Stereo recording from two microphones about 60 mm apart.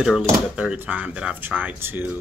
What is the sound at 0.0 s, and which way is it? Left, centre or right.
Speech, centre.